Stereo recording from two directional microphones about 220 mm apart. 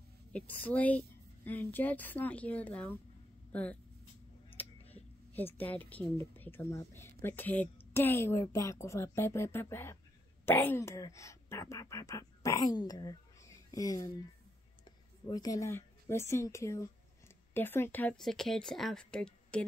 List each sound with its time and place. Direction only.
0.3 s speech: 5° left (ahead or behind)
4.9 s a sound: 10° left (ahead or behind)
6.0 s speech: 10° left (ahead or behind)